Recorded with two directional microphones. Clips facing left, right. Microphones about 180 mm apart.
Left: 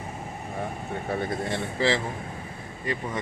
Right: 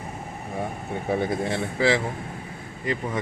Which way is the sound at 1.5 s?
10° right (ahead or behind).